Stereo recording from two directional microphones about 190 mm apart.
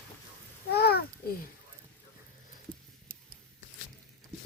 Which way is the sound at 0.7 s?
55° left (ahead or behind).